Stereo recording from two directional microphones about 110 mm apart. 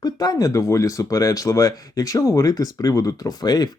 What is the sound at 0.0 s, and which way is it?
Speech, 35° left (ahead or behind).